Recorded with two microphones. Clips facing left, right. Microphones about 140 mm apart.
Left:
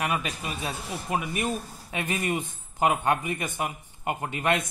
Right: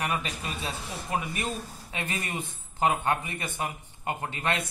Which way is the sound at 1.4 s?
15° left (ahead or behind).